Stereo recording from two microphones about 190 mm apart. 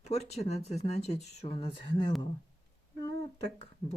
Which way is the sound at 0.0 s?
35° left (ahead or behind).